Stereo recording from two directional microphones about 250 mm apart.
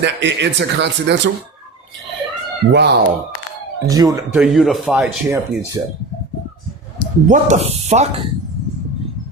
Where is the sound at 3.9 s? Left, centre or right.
Centre.